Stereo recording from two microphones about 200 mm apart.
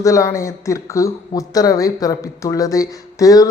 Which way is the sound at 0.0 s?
15° left (ahead or behind).